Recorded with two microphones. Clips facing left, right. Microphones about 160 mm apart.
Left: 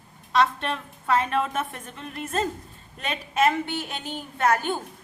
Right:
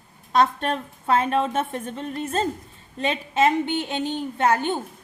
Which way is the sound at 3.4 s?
20° right (ahead or behind).